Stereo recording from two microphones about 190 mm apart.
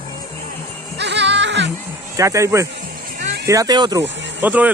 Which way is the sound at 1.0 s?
65° right (ahead or behind).